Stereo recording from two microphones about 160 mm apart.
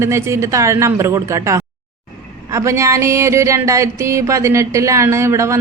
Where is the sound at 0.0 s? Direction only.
15° right (ahead or behind).